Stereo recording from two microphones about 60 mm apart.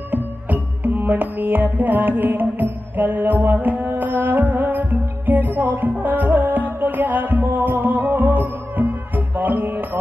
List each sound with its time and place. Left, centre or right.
0.1 s music: right